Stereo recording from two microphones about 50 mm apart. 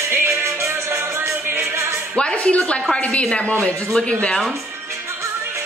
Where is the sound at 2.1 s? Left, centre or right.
Left.